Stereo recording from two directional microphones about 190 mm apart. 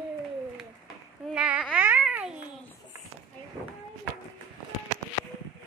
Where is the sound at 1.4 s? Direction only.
5° right (ahead or behind).